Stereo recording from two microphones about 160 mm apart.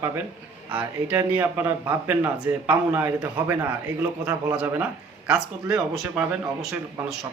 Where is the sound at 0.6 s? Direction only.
10° right (ahead or behind).